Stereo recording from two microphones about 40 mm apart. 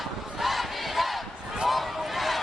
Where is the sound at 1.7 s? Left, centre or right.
Centre.